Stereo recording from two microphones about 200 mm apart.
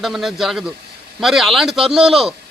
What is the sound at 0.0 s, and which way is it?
A man's voice, centre (ahead or behind).